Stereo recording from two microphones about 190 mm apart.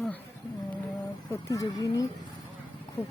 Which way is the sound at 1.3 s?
15° left (ahead or behind).